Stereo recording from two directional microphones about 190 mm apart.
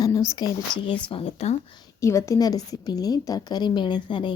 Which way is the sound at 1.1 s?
30° left (ahead or behind).